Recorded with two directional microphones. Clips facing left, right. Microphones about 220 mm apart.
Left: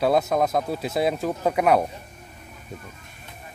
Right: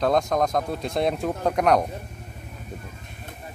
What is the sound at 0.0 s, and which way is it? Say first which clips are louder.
Speech: left 1 dB; 5° left (ahead or behind).